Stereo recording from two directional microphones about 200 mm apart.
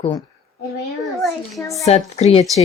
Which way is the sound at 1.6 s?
15° left (ahead or behind).